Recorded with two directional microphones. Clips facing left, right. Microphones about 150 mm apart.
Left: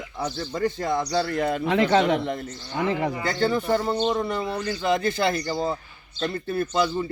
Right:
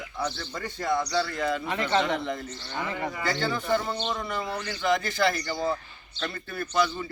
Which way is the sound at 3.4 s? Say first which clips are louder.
Left 6 dB; 30° left (ahead or behind).